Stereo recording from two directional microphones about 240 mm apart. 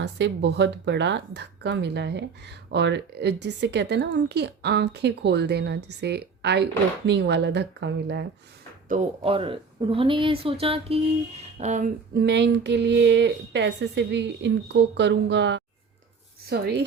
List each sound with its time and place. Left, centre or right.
0.0 s a woman's voice: right
8.9 s speech: right
12.2 s a woman's voice: right